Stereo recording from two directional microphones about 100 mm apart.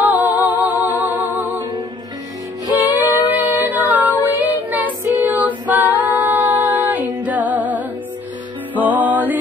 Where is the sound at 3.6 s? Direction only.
15° right (ahead or behind).